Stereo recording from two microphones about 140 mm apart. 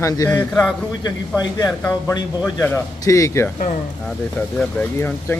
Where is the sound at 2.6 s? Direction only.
20° left (ahead or behind).